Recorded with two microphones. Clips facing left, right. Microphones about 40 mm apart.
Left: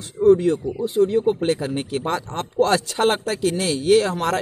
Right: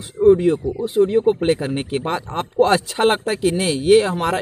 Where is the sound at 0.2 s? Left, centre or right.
Centre.